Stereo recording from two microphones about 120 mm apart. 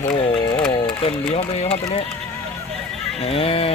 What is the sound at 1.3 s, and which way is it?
Speech, 55° left (ahead or behind).